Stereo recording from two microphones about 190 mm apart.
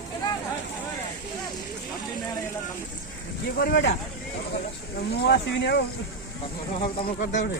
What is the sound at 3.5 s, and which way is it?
Speech, 55° left (ahead or behind).